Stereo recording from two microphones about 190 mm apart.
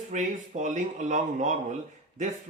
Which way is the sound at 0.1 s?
40° right (ahead or behind).